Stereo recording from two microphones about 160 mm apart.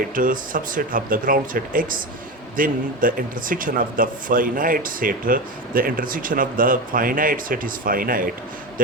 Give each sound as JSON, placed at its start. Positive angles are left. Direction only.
{"t": 0.0, "sound": "speech", "side_deg": -60}